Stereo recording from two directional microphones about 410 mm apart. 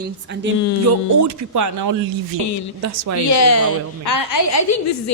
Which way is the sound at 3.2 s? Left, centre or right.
Left.